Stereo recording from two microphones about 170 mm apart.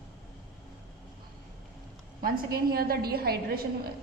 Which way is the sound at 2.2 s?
65° right (ahead or behind).